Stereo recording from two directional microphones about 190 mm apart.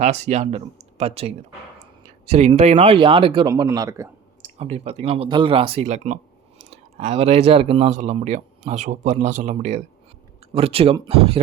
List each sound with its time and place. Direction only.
0.0 s speech: 35° right (ahead or behind); by 4.1 s 15° right (ahead or behind)
4.4 s speech: 35° right (ahead or behind)